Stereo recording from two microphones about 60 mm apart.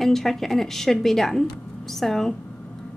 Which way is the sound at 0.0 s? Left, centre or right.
Centre.